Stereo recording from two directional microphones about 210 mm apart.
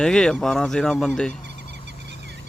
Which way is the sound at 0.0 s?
5° left (ahead or behind).